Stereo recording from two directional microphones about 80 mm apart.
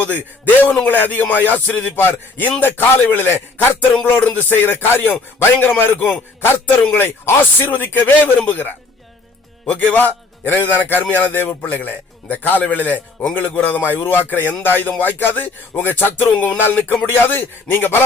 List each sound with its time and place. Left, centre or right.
0.0 s speech: left